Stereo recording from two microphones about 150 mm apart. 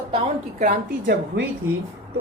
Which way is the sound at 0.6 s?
70° right (ahead or behind).